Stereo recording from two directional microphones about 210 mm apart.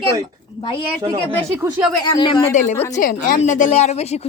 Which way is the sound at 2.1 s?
20° left (ahead or behind).